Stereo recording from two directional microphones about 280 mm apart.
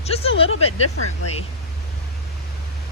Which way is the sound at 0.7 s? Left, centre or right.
Left.